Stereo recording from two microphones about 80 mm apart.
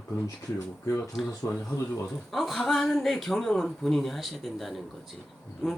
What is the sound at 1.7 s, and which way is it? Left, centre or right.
Speech, left.